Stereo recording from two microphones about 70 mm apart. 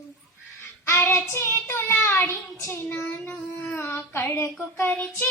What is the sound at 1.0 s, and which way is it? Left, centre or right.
Speech, left.